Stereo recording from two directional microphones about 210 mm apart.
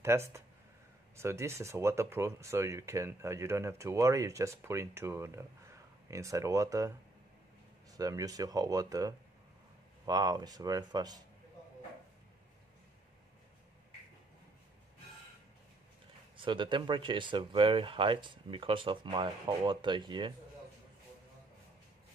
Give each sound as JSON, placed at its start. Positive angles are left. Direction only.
{"t": 0.0, "sound": "speech", "side_deg": -15}
{"t": 8.0, "sound": "speech", "side_deg": -15}
{"t": 16.3, "sound": "speech", "side_deg": -25}